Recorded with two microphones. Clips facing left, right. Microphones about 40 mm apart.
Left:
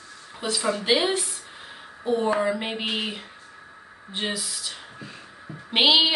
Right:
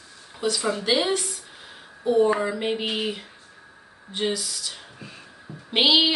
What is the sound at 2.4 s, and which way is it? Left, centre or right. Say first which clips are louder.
Speech: even; centre.